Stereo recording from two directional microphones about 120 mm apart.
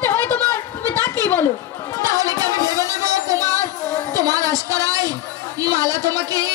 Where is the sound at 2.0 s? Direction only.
30° right (ahead or behind).